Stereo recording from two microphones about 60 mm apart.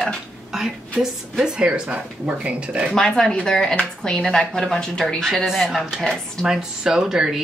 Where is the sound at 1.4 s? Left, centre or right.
Centre.